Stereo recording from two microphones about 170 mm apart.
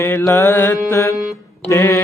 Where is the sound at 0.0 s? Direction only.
15° left (ahead or behind).